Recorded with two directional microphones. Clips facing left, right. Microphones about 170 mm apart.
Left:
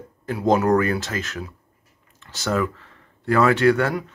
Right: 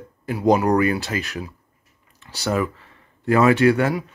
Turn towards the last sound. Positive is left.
turn(degrees=-15)  # may be behind; listen again after turning